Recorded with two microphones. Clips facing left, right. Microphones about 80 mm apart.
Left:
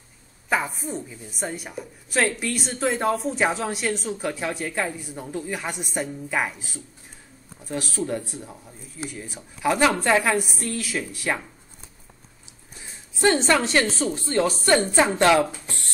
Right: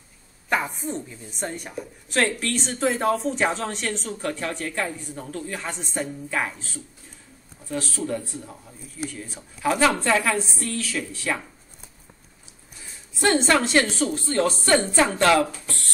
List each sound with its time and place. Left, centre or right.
0.5 s a woman's voice: centre
8.0 s a woman's voice: left
10.0 s a woman's voice: centre
13.2 s a woman's voice: centre
13.9 s a woman's voice: centre